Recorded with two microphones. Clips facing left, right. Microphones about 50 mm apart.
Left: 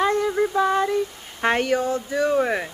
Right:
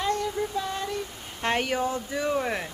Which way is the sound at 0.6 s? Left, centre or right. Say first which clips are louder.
Left 10 dB; left.